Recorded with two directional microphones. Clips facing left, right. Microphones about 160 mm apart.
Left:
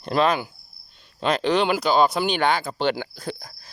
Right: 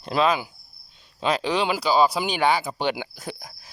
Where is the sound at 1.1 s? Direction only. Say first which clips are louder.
Left 2 dB; 5° right (ahead or behind).